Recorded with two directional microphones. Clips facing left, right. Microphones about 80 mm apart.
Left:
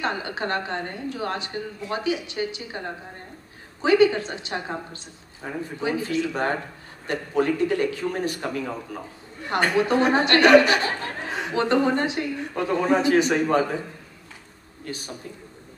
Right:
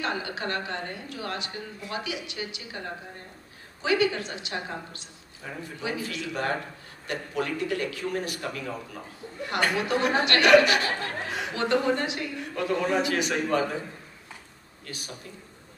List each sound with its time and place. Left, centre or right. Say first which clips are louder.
0.0 s speech: left 3 dB; left
3.8 s speech: left 7 dB; left
9.5 s speech: left 5 dB; left